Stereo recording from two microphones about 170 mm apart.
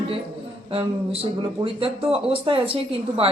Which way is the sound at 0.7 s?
35° right (ahead or behind).